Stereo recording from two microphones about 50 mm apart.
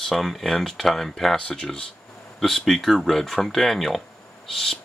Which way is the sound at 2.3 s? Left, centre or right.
Centre.